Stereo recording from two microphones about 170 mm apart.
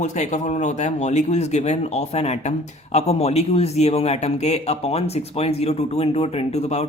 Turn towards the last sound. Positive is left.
turn(degrees=40)  # may be behind; listen again after turning